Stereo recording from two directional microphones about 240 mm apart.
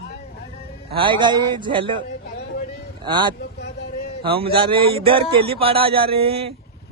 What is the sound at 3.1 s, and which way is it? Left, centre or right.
Speech, centre.